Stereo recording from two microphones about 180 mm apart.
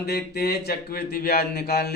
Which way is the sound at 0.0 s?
60° left (ahead or behind).